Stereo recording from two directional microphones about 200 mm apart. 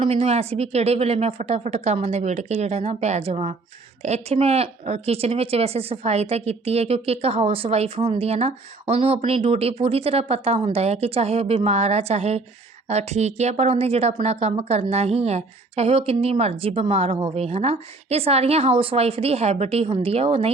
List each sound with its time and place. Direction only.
0.0 s speech: 30° right (ahead or behind)